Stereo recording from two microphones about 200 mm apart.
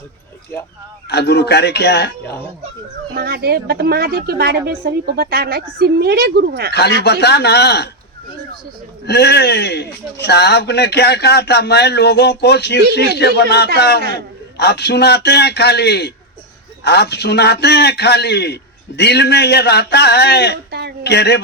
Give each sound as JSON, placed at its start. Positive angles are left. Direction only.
{"t": 1.0, "sound": "a man's voice", "side_deg": 55}
{"t": 3.2, "sound": "a woman's voice", "side_deg": -50}
{"t": 6.7, "sound": "a man's voice", "side_deg": 55}
{"t": 9.0, "sound": "a man's voice", "side_deg": 55}
{"t": 20.7, "sound": "a woman's voice", "side_deg": -55}
{"t": 21.0, "sound": "a man's voice", "side_deg": 55}